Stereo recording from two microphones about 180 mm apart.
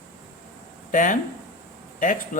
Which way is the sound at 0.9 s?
45° left (ahead or behind).